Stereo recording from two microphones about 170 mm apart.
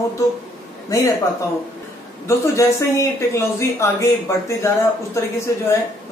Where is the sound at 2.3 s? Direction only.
20° left (ahead or behind).